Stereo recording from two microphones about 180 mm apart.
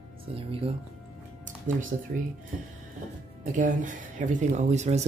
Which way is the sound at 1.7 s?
45° right (ahead or behind).